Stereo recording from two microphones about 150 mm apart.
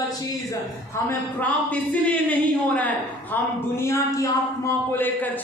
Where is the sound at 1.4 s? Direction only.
10° left (ahead or behind).